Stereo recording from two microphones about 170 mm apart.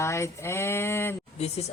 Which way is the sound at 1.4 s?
40° left (ahead or behind).